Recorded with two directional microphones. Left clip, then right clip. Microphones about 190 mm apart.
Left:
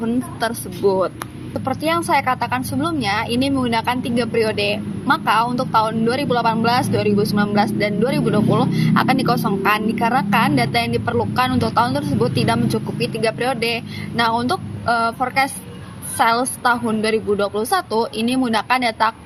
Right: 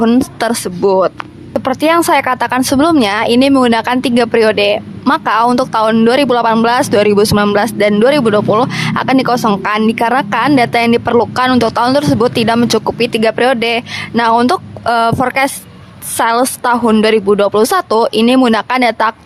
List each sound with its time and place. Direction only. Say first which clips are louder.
0.0 s speech: right 9 dB; 45° right (ahead or behind)